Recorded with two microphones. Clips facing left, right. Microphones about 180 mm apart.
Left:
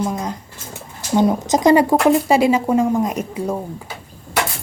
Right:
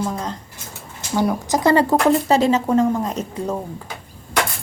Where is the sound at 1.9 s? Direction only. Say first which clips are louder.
Left 2 dB; 5° left (ahead or behind).